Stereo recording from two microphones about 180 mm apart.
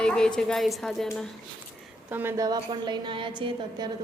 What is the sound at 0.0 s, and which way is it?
A woman's voice, 5° left (ahead or behind).